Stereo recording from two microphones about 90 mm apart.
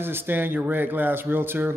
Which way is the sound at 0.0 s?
25° right (ahead or behind).